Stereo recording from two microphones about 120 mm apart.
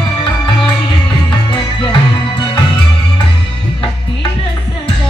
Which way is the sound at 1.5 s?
40° left (ahead or behind).